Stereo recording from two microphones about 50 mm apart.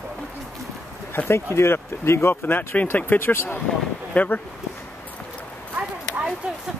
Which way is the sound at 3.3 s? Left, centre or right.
Left.